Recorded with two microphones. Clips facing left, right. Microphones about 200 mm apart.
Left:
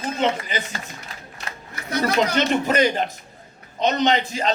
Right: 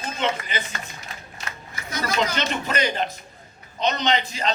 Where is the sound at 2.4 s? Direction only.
45° left (ahead or behind).